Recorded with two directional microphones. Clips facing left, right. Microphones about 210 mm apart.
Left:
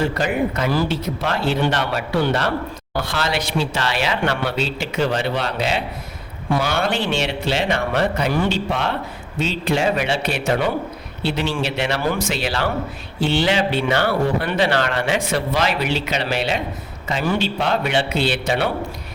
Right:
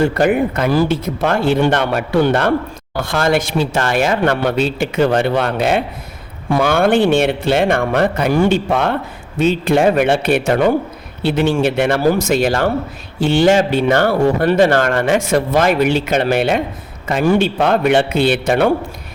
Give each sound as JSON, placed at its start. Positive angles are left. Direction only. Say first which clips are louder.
{"t": 0.0, "sound": "speech", "louder": "right 6 dB", "side_deg": -55}